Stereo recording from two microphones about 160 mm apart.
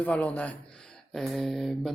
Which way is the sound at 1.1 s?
Centre (ahead or behind).